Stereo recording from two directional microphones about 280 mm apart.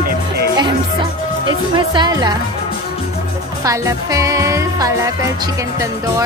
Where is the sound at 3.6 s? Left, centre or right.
Centre.